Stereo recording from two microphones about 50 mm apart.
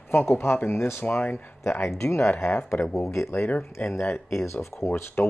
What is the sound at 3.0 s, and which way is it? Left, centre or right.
Speech, left.